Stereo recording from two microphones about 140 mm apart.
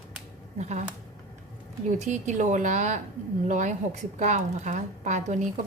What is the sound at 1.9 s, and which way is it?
A woman's voice, 60° right (ahead or behind).